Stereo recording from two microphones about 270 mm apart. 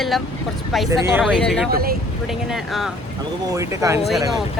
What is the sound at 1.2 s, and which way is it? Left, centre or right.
Speech, centre.